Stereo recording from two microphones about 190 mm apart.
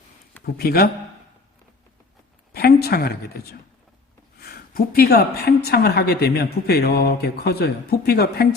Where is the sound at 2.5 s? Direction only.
55° left (ahead or behind).